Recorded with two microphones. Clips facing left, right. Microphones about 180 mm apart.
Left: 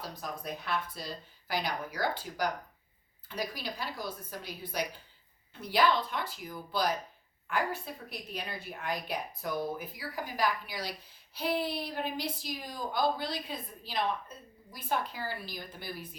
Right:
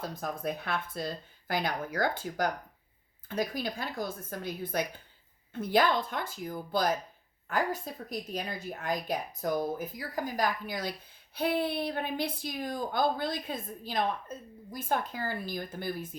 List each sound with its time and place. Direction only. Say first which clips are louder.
0.0 s speech: right 5 dB; 50° right (ahead or behind)